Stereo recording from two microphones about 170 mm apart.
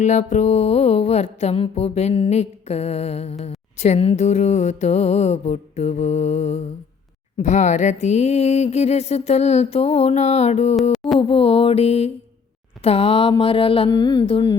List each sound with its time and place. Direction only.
0.0 s music: 45° left (ahead or behind)